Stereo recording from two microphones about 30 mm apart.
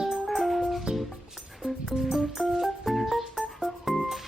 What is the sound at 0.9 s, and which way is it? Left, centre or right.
Music, right.